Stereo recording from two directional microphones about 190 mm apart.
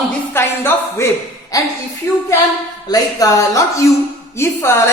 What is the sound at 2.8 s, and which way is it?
A man's voice, 20° left (ahead or behind).